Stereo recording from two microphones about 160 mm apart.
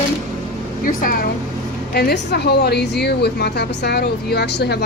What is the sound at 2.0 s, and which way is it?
A woman's voice, 85° left.